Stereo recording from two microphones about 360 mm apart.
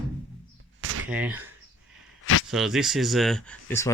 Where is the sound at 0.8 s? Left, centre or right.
Right.